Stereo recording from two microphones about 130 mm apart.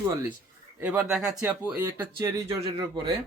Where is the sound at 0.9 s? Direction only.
10° right (ahead or behind).